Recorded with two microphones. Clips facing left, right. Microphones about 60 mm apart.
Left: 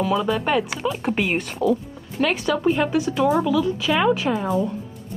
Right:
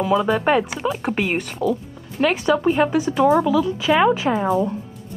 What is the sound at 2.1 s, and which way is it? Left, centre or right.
Speech, centre.